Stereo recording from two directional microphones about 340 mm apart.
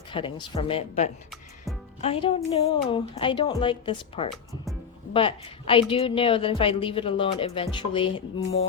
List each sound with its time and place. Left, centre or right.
0.1 s a woman's voice: centre
4.3 s speech: centre
5.1 s a woman's voice: centre